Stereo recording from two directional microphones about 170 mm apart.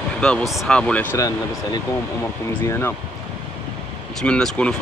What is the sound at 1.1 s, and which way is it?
Speech, 20° left (ahead or behind).